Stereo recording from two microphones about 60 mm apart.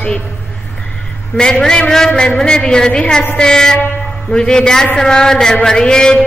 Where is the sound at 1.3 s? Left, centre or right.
Centre.